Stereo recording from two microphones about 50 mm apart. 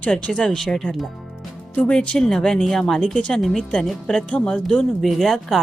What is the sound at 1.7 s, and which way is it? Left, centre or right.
A woman's voice, left.